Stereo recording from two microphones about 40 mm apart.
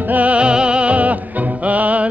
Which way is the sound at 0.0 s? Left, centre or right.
Right.